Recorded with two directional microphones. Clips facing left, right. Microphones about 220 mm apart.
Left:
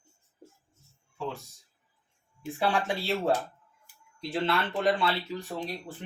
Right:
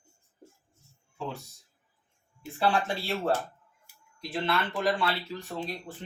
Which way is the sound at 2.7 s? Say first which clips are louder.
Even; 15° left (ahead or behind).